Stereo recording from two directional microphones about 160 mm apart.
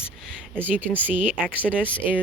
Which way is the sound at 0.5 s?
10° right (ahead or behind).